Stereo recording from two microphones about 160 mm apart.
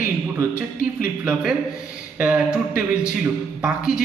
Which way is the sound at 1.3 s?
5° right (ahead or behind).